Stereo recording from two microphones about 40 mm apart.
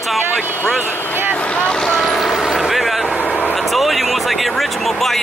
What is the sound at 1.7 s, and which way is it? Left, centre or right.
Speech, centre.